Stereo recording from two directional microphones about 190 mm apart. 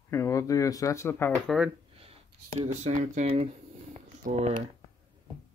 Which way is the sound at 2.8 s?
40° right (ahead or behind).